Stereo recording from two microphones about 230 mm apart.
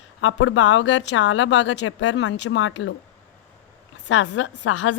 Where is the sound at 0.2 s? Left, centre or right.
Left.